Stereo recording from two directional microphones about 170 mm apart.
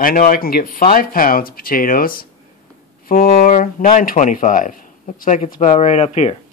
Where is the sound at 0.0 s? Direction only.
55° left (ahead or behind); by 6.3 s 40° left (ahead or behind).